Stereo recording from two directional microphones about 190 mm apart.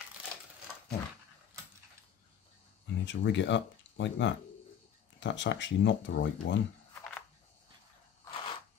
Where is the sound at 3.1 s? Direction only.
70° left (ahead or behind).